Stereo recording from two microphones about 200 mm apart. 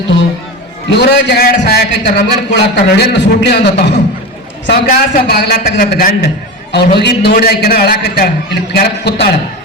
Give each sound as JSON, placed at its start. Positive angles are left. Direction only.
{"t": 0.9, "sound": "a man's voice", "side_deg": 55}